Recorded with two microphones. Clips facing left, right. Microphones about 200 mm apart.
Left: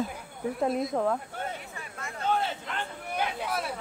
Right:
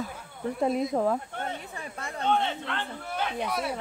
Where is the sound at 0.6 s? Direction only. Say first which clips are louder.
Right 2 dB; centre (ahead or behind).